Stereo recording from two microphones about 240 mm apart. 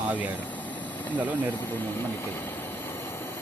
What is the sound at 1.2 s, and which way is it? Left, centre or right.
Speech, centre.